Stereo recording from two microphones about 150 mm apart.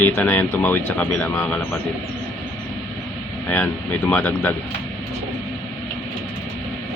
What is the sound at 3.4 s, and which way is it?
Speech, 10° left (ahead or behind).